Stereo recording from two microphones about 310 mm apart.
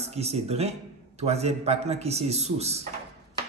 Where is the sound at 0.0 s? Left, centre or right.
Centre.